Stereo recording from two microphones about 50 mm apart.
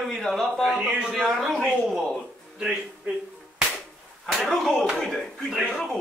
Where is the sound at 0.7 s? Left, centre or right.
Centre.